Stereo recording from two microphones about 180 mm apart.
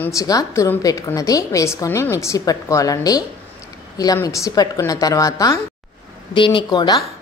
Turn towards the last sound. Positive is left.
turn(degrees=20)  # may be behind; listen again after turning